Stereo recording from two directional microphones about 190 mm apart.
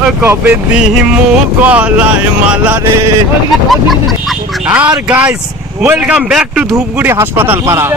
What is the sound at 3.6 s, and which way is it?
A man's voice, centre (ahead or behind).